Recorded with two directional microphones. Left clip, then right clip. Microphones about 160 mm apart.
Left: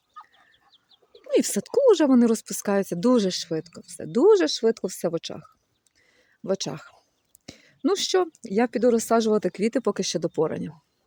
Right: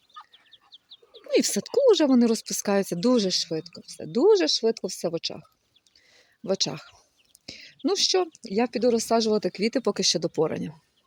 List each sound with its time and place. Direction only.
0.7 s chicken: 30° left (ahead or behind)
1.3 s speech: 10° left (ahead or behind)
3.1 s speech: 20° left (ahead or behind)
6.1 s speech: 5° left (ahead or behind)
7.4 s whispering: 20° left (ahead or behind)
7.9 s speech: 25° left (ahead or behind); by 10.8 s centre (ahead or behind)